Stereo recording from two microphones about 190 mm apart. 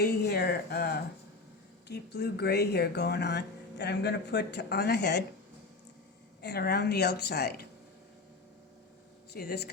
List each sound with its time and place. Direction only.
0.0 s speech: 55° left (ahead or behind)
6.4 s speech: 60° left (ahead or behind)
9.3 s speech: 55° left (ahead or behind)